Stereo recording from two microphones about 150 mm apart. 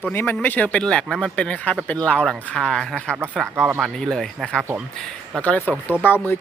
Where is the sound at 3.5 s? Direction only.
15° right (ahead or behind).